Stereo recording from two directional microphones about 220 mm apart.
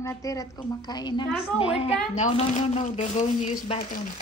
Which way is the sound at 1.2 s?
Centre (ahead or behind).